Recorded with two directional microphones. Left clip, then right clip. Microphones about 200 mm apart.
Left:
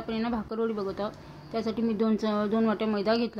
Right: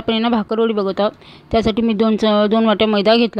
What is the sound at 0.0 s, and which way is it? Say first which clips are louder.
A woman's voice: right 14 dB; 40° right (ahead or behind).